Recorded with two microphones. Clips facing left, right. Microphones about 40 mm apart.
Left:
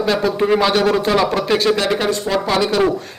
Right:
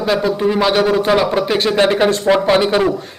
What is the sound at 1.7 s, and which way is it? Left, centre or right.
Speech, right.